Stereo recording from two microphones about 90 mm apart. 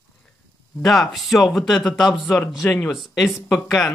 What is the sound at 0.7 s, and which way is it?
Speech, centre (ahead or behind).